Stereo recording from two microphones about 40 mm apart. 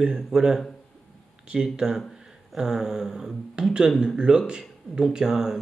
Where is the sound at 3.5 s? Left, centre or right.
Centre.